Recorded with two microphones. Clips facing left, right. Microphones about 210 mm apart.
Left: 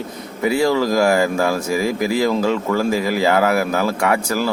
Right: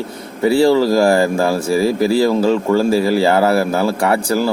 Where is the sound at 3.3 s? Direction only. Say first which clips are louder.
Right 3 dB; 30° right (ahead or behind).